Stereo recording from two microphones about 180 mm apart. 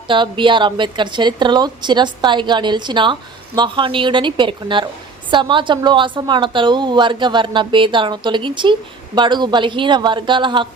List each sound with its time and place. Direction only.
0.1 s a woman's voice: 25° right (ahead or behind)